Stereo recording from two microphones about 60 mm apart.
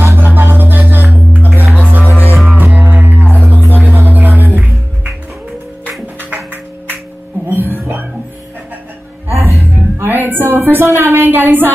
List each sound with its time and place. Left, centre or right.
0.0 s music: right
6.3 s music: right
9.4 s music: right